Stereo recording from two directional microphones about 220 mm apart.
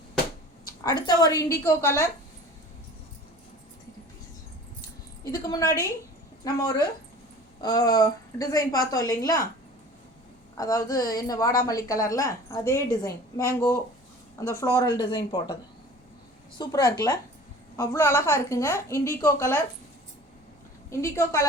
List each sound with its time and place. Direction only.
0.9 s a woman's voice: 20° left (ahead or behind)
5.2 s a woman's voice: 15° left (ahead or behind)
10.6 s a woman's voice: 15° left (ahead or behind)
16.6 s a woman's voice: 15° left (ahead or behind)
20.9 s a woman's voice: 15° left (ahead or behind)